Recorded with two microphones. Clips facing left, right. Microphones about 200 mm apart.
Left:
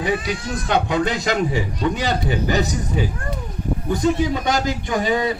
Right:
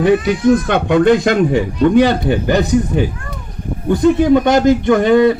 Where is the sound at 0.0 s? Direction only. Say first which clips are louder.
Right 11 dB; 55° right (ahead or behind).